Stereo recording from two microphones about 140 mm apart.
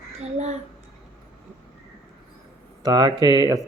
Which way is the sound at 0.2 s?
55° right (ahead or behind).